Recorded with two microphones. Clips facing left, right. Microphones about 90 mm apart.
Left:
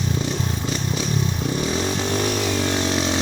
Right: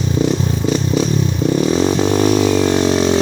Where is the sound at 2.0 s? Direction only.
20° right (ahead or behind).